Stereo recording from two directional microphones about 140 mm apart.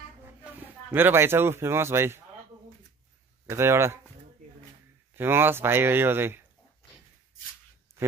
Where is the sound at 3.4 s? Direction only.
20° right (ahead or behind).